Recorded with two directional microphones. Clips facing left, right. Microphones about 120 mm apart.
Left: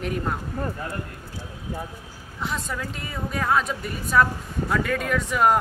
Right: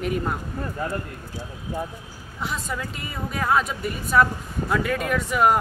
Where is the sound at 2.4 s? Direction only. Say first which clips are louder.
Even; 5° right (ahead or behind).